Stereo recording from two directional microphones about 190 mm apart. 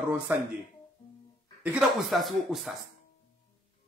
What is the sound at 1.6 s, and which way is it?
Speech, 5° right (ahead or behind).